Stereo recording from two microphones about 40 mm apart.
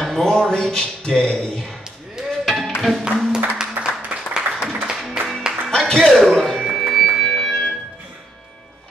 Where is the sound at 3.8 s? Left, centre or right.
Right.